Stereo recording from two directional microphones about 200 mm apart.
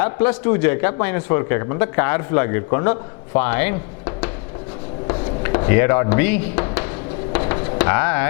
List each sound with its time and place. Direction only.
0.0 s a man's voice: 10° left (ahead or behind)
5.0 s a sound: 20° left (ahead or behind)
7.8 s speech: 10° left (ahead or behind)